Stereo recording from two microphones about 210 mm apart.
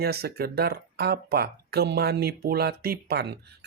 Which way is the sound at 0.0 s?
50° right (ahead or behind).